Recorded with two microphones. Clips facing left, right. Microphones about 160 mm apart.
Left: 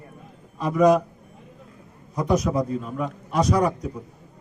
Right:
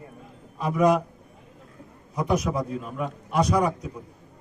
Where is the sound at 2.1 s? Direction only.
5° right (ahead or behind).